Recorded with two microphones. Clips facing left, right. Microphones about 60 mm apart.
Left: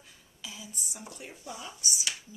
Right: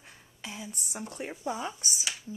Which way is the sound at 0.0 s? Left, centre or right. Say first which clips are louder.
Right 3 dB; right.